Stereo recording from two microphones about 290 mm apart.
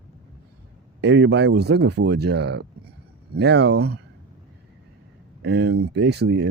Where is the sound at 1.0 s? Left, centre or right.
Right.